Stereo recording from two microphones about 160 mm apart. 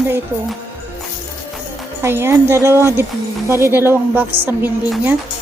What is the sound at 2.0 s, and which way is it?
A woman's voice, 15° right (ahead or behind).